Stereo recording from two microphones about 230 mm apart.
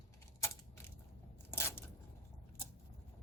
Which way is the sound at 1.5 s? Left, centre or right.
Centre.